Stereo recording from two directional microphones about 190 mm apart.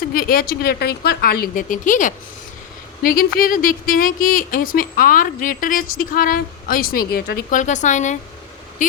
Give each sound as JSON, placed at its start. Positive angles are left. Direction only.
{"t": 0.1, "sound": "speech", "side_deg": 50}
{"t": 7.5, "sound": "a woman's voice", "side_deg": 40}